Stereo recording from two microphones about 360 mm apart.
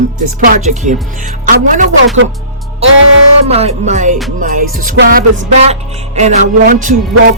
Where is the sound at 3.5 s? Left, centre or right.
Centre.